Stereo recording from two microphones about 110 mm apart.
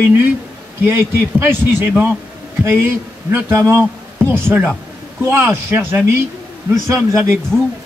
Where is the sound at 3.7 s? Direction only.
10° left (ahead or behind).